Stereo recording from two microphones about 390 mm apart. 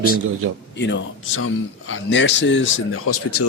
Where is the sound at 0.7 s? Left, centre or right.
Left.